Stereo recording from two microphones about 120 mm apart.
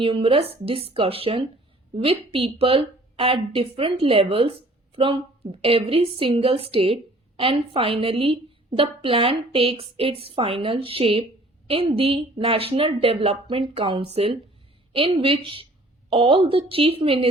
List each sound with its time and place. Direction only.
0.0 s speech: 50° right (ahead or behind)
14.0 s speech: 55° right (ahead or behind)